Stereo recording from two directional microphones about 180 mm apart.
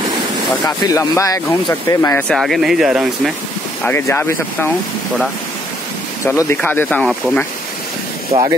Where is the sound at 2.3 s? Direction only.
Centre (ahead or behind).